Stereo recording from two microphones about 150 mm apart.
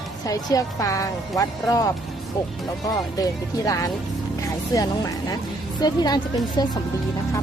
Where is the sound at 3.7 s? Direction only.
20° left (ahead or behind).